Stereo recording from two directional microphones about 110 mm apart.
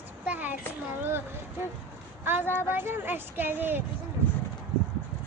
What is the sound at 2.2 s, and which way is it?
Speech, 20° right (ahead or behind).